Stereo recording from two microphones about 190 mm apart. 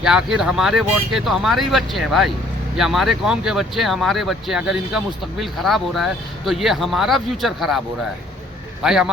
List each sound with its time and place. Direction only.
0.0 s speech: 5° right (ahead or behind)
8.8 s speech: 5° right (ahead or behind)